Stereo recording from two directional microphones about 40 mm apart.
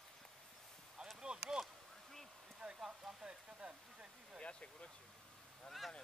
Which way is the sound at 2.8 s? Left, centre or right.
Centre.